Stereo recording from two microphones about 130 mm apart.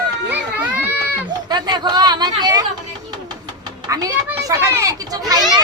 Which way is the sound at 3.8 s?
25° right (ahead or behind).